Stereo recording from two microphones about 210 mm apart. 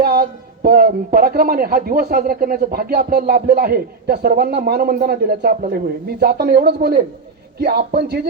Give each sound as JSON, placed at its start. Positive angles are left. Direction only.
{"t": 0.0, "sound": "speech", "side_deg": -50}